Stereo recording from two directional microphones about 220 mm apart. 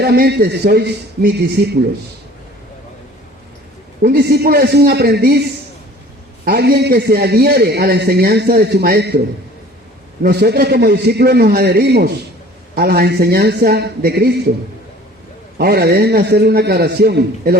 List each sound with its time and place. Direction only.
0.0 s a man's voice: 45° right (ahead or behind)
4.0 s a man's voice: 45° right (ahead or behind)
6.4 s a man's voice: 45° right (ahead or behind)
10.2 s a man's voice: 45° right (ahead or behind)
15.5 s a man's voice: 45° right (ahead or behind)